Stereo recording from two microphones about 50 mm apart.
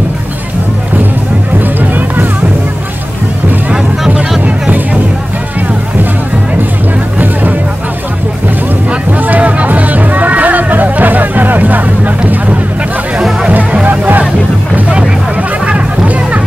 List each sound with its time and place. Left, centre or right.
1.8 s music: right
9.2 s music: right
13.8 s music: right
15.6 s music: right